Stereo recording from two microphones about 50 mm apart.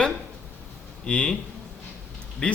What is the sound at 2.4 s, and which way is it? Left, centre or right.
Speech, centre.